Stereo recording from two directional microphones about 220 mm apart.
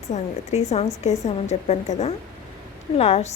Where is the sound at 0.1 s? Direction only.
35° left (ahead or behind).